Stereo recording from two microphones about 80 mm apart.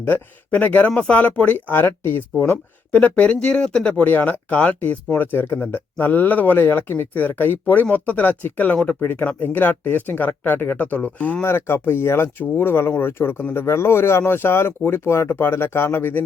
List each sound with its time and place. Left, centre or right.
0.0 s speech: left
11.4 s speech: left